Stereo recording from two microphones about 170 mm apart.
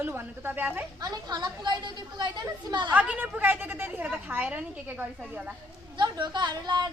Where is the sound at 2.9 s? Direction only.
10° right (ahead or behind).